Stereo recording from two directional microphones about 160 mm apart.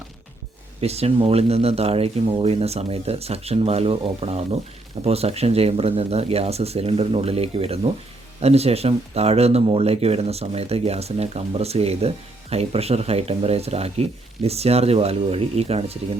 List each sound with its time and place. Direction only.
0.8 s speech: 40° right (ahead or behind)